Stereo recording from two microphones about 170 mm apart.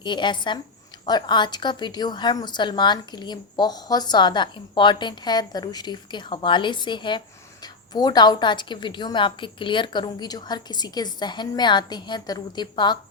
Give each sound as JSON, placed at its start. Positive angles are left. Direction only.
{"t": 0.0, "sound": "a woman's voice", "side_deg": 25}